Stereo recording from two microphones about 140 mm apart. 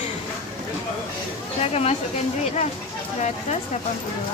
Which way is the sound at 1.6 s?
45° left (ahead or behind).